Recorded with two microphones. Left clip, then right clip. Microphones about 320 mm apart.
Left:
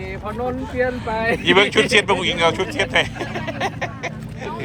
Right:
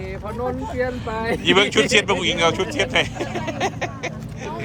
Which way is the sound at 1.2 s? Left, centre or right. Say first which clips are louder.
Left 4 dB; centre.